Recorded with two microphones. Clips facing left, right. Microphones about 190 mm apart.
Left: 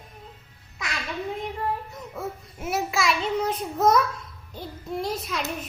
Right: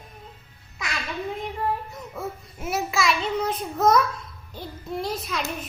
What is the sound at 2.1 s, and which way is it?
Babbling, centre (ahead or behind).